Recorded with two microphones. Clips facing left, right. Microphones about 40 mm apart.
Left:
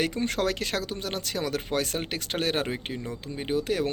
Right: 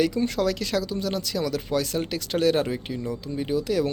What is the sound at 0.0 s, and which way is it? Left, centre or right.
Speech, left.